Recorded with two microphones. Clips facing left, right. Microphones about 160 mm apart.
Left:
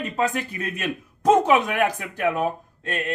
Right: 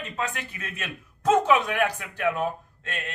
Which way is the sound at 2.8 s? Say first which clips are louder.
Left 7 dB; 40° left (ahead or behind).